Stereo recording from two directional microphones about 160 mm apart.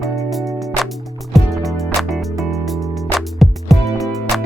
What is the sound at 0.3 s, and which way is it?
Music, centre (ahead or behind).